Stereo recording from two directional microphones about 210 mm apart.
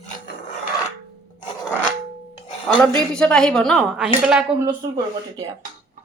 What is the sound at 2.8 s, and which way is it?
A woman's voice, 5° left (ahead or behind).